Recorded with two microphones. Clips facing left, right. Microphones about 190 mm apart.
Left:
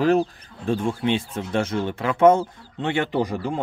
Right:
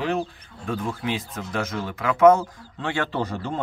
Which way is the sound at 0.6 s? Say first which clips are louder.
Left 5 dB; 25° left (ahead or behind).